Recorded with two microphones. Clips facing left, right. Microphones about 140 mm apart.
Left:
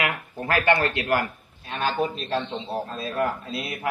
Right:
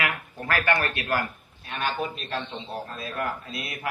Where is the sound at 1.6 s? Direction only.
30° left (ahead or behind).